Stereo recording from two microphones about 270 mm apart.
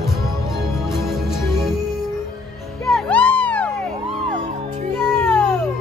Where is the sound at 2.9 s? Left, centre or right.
Centre.